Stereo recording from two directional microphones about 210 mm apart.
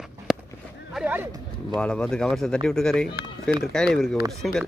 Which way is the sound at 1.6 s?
5° left (ahead or behind).